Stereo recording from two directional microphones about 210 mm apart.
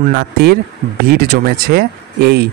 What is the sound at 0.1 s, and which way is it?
Speech, 50° right (ahead or behind).